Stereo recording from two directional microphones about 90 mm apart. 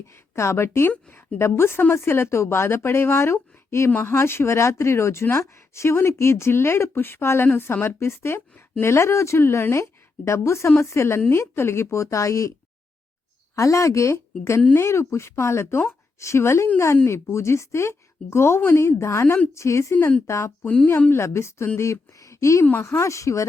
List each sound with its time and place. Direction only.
0.1 s a woman's voice: 30° left (ahead or behind)
13.6 s a woman's voice: 35° left (ahead or behind)